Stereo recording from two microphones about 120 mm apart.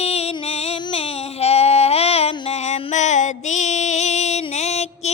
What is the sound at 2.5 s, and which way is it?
Music, 70° left (ahead or behind).